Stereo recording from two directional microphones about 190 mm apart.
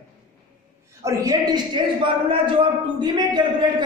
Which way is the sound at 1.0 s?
15° right (ahead or behind).